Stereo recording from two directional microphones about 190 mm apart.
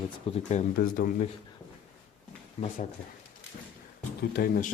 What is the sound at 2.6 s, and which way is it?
Speech, 35° left (ahead or behind).